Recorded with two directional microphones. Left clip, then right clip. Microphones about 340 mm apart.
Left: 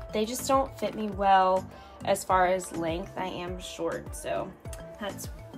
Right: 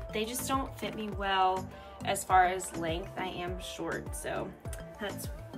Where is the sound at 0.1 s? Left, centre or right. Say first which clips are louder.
Left 7 dB; centre.